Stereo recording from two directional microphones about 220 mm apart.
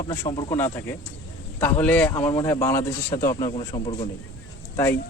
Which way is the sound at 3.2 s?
35° left (ahead or behind).